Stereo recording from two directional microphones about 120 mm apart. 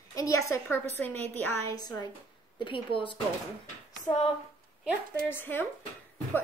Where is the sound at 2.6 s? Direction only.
45° left (ahead or behind).